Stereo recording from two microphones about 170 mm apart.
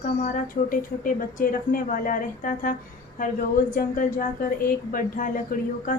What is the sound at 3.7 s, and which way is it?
Speech, 50° left (ahead or behind).